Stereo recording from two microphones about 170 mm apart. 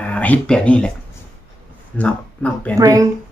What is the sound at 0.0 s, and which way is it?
Speech, 10° left (ahead or behind).